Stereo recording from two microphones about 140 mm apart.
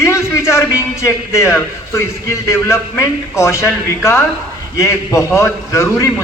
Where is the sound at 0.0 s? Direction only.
20° left (ahead or behind).